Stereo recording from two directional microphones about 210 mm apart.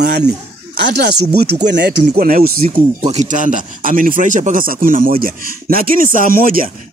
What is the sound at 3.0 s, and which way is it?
Speech, 30° right (ahead or behind).